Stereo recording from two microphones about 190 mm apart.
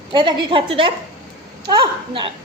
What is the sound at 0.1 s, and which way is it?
A woman's voice, 25° right (ahead or behind).